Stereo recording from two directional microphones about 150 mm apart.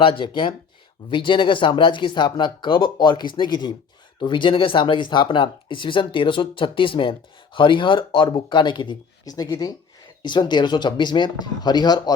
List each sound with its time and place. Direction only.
0.0 s speech: 35° left (ahead or behind)